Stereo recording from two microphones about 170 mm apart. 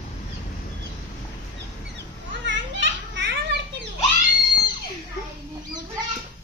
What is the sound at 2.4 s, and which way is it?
Children playing, 90° right.